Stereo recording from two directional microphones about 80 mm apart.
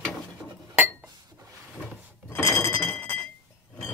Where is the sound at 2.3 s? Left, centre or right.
Left.